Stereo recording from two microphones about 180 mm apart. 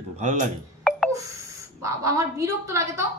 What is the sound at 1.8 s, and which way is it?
A woman's voice, 15° right (ahead or behind).